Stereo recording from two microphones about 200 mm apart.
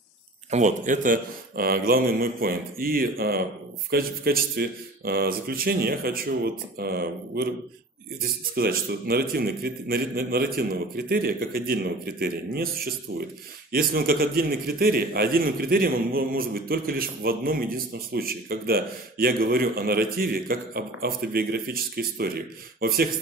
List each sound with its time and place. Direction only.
0.5 s a man's voice: 35° right (ahead or behind)
8.5 s a man's voice: 50° right (ahead or behind)